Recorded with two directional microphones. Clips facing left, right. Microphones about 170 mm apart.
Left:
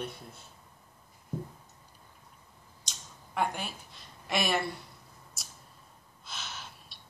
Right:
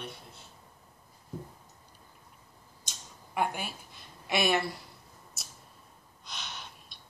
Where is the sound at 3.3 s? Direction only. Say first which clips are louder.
Even; 5° right (ahead or behind).